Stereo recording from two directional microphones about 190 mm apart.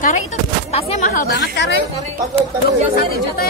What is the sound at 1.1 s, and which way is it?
Speech, 55° left (ahead or behind).